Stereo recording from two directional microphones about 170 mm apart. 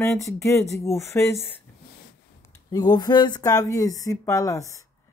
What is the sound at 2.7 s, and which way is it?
Speech, 25° left (ahead or behind).